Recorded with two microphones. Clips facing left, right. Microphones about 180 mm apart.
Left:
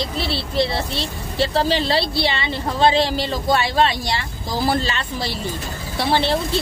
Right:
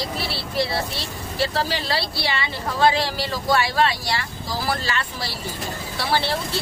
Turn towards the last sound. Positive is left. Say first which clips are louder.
# left 4 dB
turn(degrees=20)  # may be behind; listen again after turning